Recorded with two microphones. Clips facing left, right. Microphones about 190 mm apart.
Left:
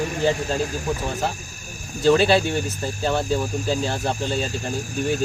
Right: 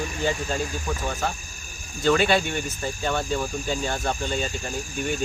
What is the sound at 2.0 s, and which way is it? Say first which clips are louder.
Speech: left 4 dB; 30° left (ahead or behind).